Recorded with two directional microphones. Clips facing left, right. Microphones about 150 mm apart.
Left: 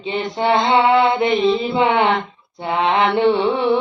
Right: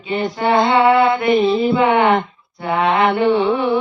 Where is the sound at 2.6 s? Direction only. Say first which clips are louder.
Right 1 dB; 25° left (ahead or behind).